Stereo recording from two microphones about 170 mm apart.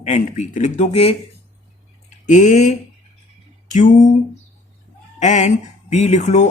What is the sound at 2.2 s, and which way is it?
Speech, 45° left (ahead or behind).